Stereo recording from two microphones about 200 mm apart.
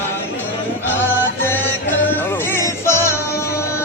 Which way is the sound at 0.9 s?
10° left (ahead or behind).